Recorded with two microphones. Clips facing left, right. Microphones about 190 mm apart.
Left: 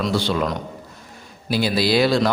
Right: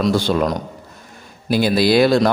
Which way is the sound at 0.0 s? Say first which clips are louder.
Right 4 dB; 45° right (ahead or behind).